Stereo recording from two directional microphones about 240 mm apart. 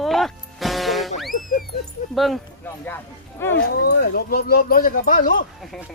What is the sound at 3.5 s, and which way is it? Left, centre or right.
Speech, left.